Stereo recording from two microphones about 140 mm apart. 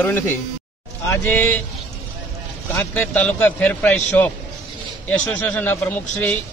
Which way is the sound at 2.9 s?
10° left (ahead or behind).